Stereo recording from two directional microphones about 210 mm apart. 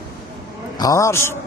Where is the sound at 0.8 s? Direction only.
15° left (ahead or behind).